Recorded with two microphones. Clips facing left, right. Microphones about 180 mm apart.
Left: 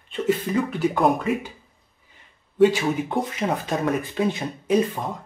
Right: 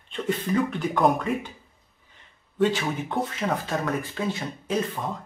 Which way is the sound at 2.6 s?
10° left (ahead or behind).